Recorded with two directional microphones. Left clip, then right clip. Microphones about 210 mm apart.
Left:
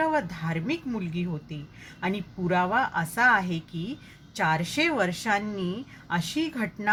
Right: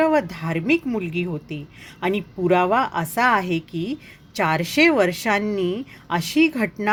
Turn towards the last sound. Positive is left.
turn(degrees=-35)  # may be behind; listen again after turning